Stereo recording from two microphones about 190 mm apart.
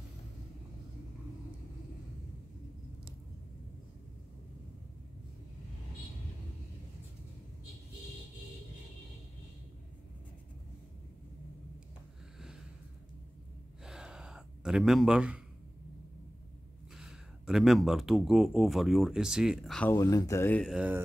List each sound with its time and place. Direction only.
13.8 s gasp: 5° right (ahead or behind)
16.9 s speech: centre (ahead or behind)
20.0 s speech: 15° left (ahead or behind)
20.6 s speech: 5° right (ahead or behind)